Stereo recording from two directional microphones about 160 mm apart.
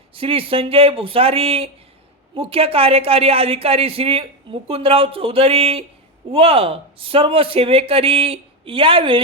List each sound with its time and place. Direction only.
0.1 s a woman's voice: 35° right (ahead or behind)